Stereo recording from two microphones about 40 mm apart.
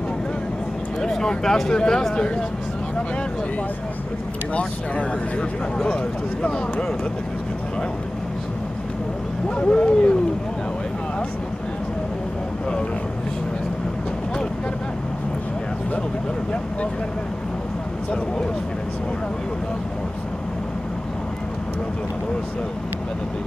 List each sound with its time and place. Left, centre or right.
1.0 s speech: centre
9.6 s speech: left